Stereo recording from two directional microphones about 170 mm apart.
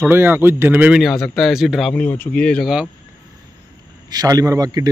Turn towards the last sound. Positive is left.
turn(degrees=-20)  # may be behind; listen again after turning